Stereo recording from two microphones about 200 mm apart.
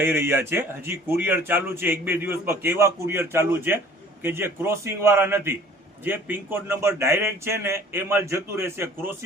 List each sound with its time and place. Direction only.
0.0 s a man's voice: 10° right (ahead or behind)